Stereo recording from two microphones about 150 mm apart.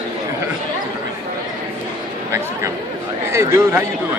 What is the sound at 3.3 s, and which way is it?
Speech, 20° right (ahead or behind).